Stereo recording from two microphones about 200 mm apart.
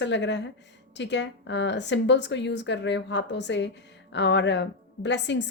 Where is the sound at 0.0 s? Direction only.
60° left (ahead or behind).